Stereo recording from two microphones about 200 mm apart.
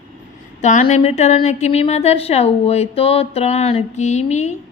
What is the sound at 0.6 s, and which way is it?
A woman's voice, 40° left (ahead or behind).